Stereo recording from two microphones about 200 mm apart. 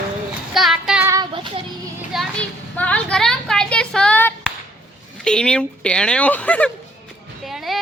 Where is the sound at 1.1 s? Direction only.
20° right (ahead or behind).